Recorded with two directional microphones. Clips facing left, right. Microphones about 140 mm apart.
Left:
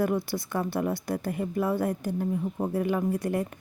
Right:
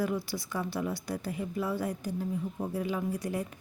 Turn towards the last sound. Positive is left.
turn(degrees=55)  # may be behind; listen again after turning